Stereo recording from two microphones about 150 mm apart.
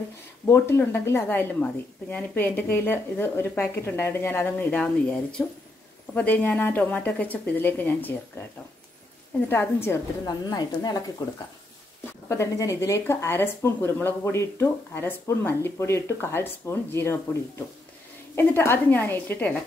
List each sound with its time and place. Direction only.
0.5 s speech: 15° left (ahead or behind)
9.5 s speech: 15° left (ahead or behind)
10.2 s speech: 25° left (ahead or behind)
12.3 s speech: 20° left (ahead or behind)